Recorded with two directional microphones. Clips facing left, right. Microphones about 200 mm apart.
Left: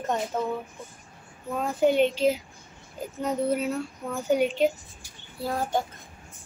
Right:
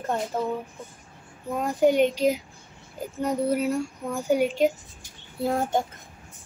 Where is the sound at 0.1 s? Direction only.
10° right (ahead or behind).